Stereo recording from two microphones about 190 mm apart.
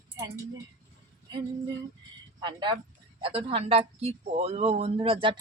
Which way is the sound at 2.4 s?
25° right (ahead or behind).